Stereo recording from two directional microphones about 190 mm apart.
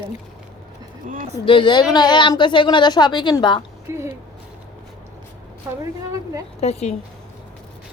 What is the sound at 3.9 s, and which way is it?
Speech, 15° right (ahead or behind).